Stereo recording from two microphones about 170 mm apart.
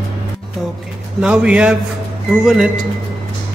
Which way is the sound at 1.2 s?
5° right (ahead or behind).